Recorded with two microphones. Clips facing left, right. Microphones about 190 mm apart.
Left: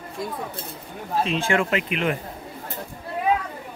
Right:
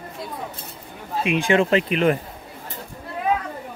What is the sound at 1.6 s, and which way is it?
Speech, 35° right (ahead or behind).